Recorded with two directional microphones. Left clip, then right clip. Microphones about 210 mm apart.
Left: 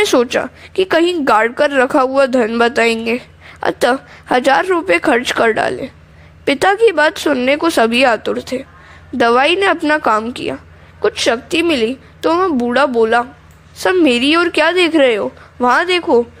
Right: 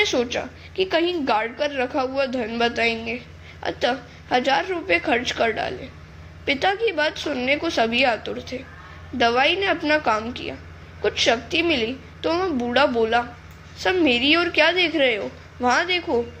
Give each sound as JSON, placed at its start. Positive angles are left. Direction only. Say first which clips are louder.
{"t": 0.0, "sound": "a woman's voice", "louder": "left 9 dB", "side_deg": 50}